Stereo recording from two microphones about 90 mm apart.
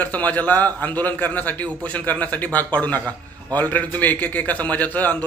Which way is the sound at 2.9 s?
40° right (ahead or behind).